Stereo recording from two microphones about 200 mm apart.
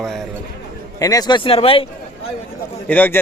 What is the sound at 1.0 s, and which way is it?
Speech, 20° left (ahead or behind).